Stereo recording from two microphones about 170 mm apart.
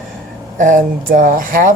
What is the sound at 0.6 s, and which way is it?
Speech, 50° right (ahead or behind).